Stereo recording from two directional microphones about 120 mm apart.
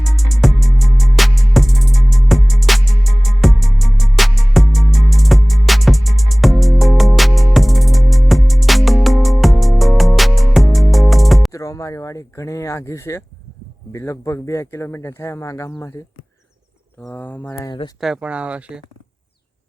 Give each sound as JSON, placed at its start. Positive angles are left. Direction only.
{"t": 0.0, "sound": "music", "side_deg": 0}
{"t": 11.5, "sound": "speech", "side_deg": 25}
{"t": 17.0, "sound": "speech", "side_deg": 10}
{"t": 18.0, "sound": "speech", "side_deg": -5}